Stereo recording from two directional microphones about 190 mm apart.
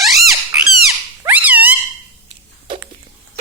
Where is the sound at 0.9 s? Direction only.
10° right (ahead or behind).